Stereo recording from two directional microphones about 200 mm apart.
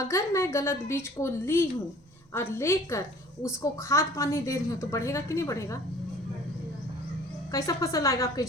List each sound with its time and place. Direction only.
0.0 s a woman's voice: 15° left (ahead or behind)
7.5 s a woman's voice: 15° left (ahead or behind)